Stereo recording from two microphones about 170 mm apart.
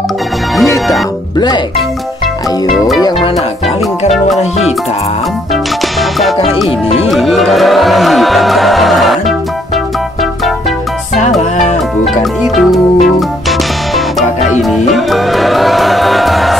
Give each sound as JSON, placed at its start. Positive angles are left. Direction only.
{"t": 4.4, "sound": "music", "side_deg": 40}
{"t": 6.6, "sound": "speech", "side_deg": 0}
{"t": 12.2, "sound": "music", "side_deg": 0}